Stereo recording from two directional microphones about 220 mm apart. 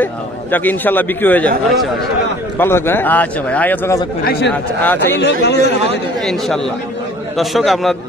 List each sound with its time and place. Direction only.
0.0 s a man's voice: 10° left (ahead or behind)
2.6 s speech: 10° left (ahead or behind)
4.2 s a man's voice: 45° left (ahead or behind)
4.5 s speech: 10° left (ahead or behind)
5.2 s a man's voice: 50° left (ahead or behind)
6.2 s a man's voice: centre (ahead or behind)